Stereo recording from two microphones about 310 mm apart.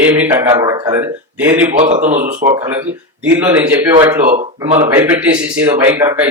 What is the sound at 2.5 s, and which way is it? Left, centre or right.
A man's voice, centre.